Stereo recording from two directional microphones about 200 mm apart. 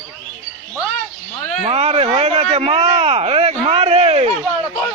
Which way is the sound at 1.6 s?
30° right (ahead or behind).